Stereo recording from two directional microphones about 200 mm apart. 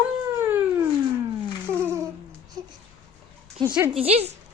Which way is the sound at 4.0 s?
30° right (ahead or behind).